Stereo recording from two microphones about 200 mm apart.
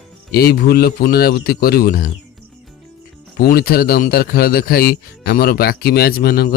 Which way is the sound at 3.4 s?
50° left (ahead or behind).